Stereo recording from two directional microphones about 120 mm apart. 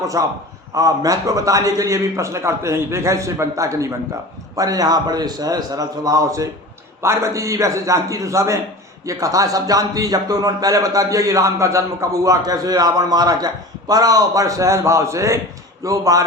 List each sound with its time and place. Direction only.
0.0 s a man's voice: 30° right (ahead or behind)